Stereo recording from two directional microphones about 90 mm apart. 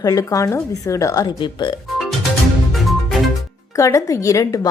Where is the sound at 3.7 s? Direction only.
35° left (ahead or behind).